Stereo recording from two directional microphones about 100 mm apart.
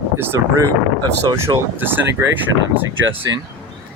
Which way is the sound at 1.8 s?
20° right (ahead or behind).